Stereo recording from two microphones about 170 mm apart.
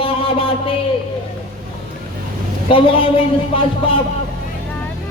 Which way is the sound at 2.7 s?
30° left (ahead or behind).